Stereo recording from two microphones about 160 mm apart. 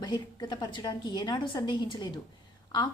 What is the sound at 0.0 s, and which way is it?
A woman's voice, 30° left (ahead or behind).